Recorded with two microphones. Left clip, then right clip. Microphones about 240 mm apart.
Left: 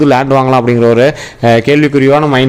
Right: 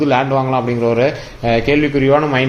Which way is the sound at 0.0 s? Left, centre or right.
Left.